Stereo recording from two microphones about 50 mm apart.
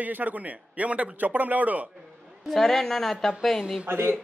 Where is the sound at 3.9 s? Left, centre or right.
Right.